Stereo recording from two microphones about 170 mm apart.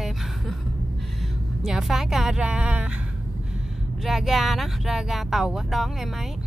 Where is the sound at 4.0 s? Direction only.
Centre (ahead or behind).